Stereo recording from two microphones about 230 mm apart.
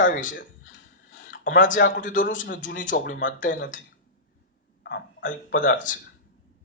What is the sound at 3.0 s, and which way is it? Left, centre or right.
Speech, left.